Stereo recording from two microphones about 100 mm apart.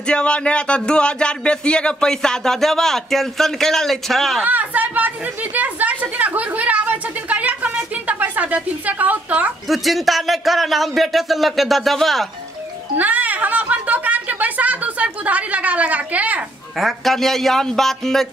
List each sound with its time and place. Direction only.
0.0 s speech: 10° left (ahead or behind)
4.5 s chatter: 15° right (ahead or behind)
9.7 s a man's voice: centre (ahead or behind)
12.9 s a sound: 15° right (ahead or behind)
16.7 s a man's voice: centre (ahead or behind)